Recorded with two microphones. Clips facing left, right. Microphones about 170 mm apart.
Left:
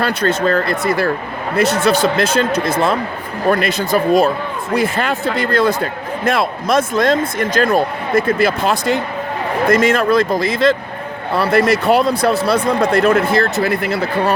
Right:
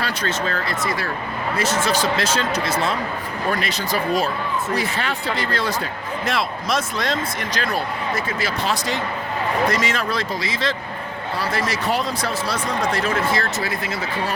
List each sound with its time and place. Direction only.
0.0 s speech: 55° left (ahead or behind)